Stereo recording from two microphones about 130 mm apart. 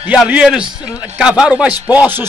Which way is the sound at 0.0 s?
10° right (ahead or behind).